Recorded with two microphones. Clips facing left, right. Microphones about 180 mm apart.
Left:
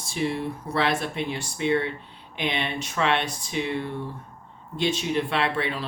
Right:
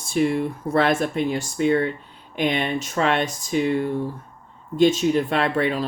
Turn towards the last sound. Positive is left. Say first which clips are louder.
# right 5 dB
turn(degrees=-45)  # may be behind; listen again after turning